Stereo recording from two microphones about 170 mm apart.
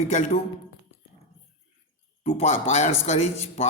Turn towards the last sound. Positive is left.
turn(degrees=40)  # may be behind; listen again after turning